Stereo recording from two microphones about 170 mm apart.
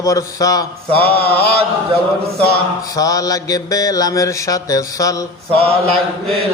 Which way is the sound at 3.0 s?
20° left (ahead or behind).